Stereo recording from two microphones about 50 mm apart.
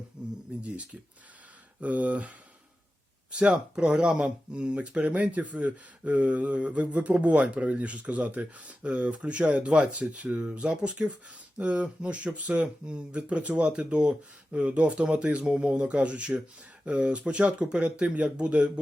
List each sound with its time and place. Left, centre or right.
0.2 s a sound: centre
1.8 s speech: right
3.3 s speech: right